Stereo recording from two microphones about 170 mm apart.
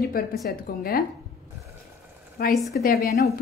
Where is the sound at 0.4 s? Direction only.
60° left (ahead or behind).